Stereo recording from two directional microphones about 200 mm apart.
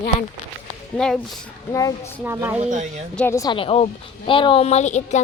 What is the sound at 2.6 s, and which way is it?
Speech, 35° right (ahead or behind).